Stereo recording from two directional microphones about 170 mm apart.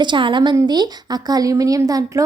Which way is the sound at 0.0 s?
30° right (ahead or behind).